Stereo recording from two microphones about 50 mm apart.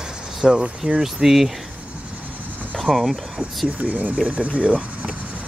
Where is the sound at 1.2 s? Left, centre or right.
Centre.